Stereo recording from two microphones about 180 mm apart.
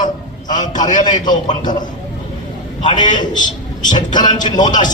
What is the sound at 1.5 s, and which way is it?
Speech, 25° left (ahead or behind).